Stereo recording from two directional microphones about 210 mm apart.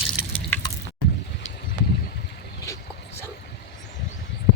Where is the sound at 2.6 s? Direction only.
15° left (ahead or behind).